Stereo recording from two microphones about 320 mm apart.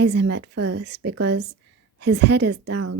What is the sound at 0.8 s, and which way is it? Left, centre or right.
A woman's voice, right.